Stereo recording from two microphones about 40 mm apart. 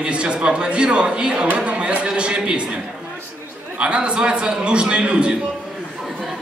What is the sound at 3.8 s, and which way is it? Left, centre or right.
A man's voice, right.